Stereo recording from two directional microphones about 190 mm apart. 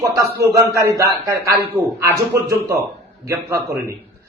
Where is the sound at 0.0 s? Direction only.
15° right (ahead or behind).